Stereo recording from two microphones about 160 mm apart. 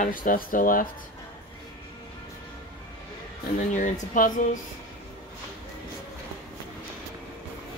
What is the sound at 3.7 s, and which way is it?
Speech, 50° left (ahead or behind).